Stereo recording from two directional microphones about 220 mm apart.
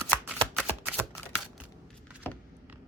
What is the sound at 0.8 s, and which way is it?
Shuffling cards, 5° right (ahead or behind).